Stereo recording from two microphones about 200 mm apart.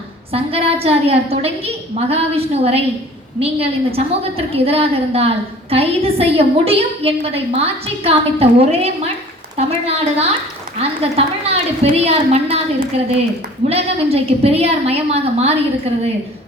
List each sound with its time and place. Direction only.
0.3 s a woman's voice: 30° right (ahead or behind)
13.7 s a woman's voice: 30° right (ahead or behind)